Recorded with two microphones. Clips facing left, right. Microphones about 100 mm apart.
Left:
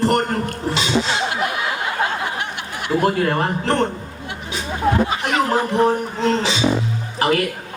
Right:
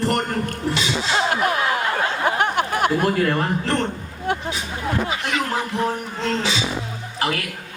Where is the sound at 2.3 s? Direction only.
50° right (ahead or behind).